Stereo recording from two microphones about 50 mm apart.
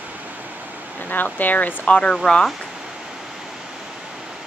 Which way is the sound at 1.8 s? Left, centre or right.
Left.